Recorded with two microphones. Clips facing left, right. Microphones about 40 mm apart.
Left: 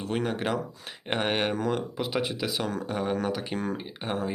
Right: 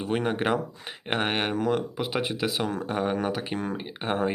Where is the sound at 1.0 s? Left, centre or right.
Centre.